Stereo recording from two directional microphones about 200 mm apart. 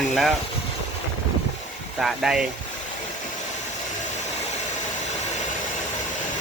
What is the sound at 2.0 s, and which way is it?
Speech, 5° right (ahead or behind).